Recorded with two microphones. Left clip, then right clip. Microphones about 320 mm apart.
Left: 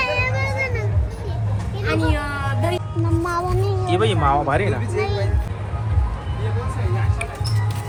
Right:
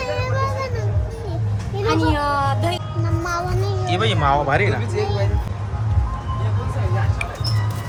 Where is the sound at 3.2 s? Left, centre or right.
Left.